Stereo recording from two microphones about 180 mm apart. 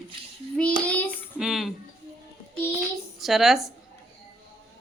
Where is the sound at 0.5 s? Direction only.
5° left (ahead or behind).